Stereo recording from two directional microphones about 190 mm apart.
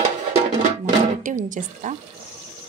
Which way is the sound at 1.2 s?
40° right (ahead or behind).